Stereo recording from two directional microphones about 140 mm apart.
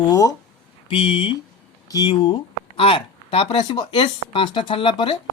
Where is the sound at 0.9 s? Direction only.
35° left (ahead or behind).